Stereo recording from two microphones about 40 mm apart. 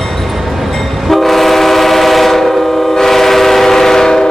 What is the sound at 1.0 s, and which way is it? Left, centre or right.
Train, centre.